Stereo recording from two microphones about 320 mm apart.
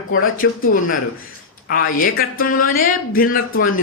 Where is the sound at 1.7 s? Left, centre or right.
Left.